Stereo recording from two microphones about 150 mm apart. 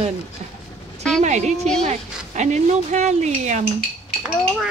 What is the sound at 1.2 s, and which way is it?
Speech, 50° right (ahead or behind).